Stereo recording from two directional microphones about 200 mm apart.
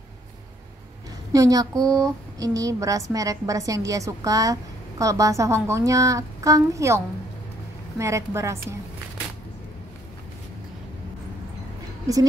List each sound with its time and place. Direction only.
1.3 s a woman's voice: 15° right (ahead or behind)
8.0 s a woman's voice: 15° right (ahead or behind)